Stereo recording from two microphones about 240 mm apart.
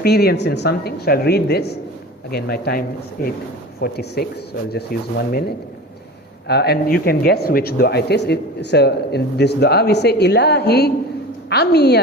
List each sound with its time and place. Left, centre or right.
0.0 s a woman's voice: left
6.5 s speech: left